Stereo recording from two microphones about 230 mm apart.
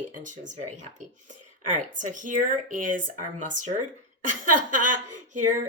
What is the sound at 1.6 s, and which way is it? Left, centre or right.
A woman's voice, right.